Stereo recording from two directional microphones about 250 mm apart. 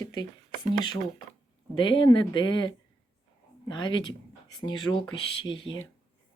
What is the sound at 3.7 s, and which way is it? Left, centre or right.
A woman's voice, centre.